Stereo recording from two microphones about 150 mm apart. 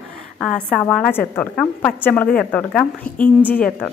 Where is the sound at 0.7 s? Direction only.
5° left (ahead or behind).